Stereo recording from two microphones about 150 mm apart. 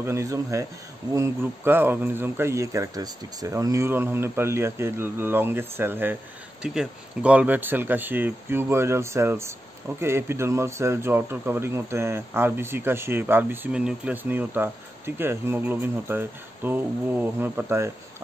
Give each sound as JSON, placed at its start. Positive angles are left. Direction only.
{"t": 0.0, "sound": "speech", "side_deg": -20}